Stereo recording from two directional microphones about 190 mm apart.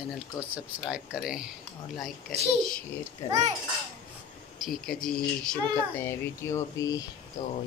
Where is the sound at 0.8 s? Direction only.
5° right (ahead or behind).